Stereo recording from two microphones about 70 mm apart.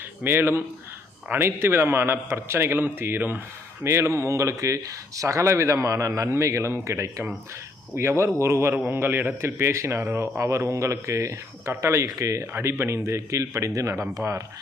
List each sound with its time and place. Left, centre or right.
0.3 s a man's voice: right
3.8 s a man's voice: right